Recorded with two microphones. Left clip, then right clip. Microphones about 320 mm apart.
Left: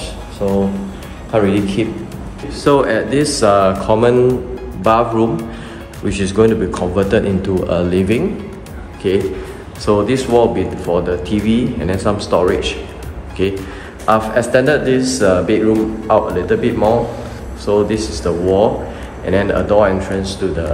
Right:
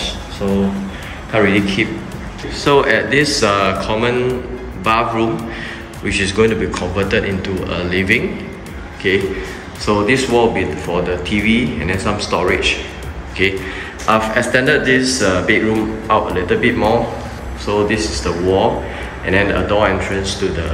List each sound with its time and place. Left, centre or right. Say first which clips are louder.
0.4 s a man's voice: left 2 dB; centre